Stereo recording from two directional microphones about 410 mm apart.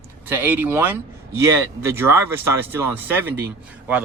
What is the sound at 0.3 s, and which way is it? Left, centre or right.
A man's voice, centre.